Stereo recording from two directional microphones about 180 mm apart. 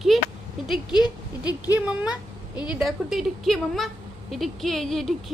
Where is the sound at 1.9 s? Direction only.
5° right (ahead or behind).